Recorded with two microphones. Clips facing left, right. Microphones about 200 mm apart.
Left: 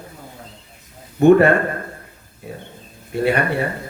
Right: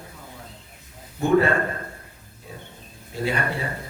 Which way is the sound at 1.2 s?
65° left (ahead or behind).